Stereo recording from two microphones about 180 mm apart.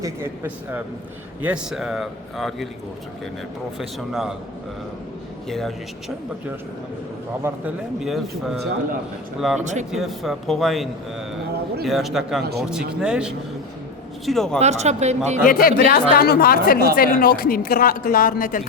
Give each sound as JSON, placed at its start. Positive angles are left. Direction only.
{"t": 0.0, "sound": "speech", "side_deg": -10}
{"t": 3.8, "sound": "speech", "side_deg": 0}
{"t": 5.5, "sound": "speech", "side_deg": 0}
{"t": 8.0, "sound": "speech", "side_deg": 0}
{"t": 9.6, "sound": "speech", "side_deg": -40}
{"t": 9.9, "sound": "speech", "side_deg": 0}
{"t": 12.4, "sound": "speech", "side_deg": -65}
{"t": 13.0, "sound": "speech", "side_deg": -5}
{"t": 14.6, "sound": "speech", "side_deg": -40}
{"t": 15.4, "sound": "a woman's voice", "side_deg": 55}